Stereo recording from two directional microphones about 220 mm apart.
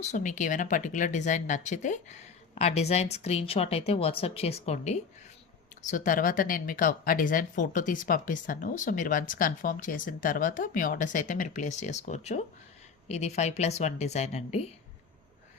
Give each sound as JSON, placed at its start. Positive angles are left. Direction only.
{"t": 0.0, "sound": "speech", "side_deg": 35}